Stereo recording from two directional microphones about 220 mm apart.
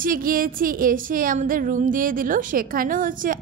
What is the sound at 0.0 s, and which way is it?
Speech, 40° right (ahead or behind).